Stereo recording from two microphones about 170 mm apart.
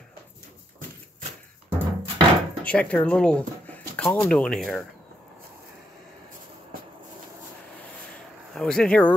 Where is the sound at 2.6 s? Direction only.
5° left (ahead or behind).